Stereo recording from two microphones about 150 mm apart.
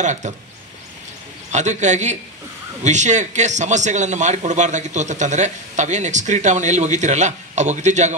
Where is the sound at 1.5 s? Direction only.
50° right (ahead or behind).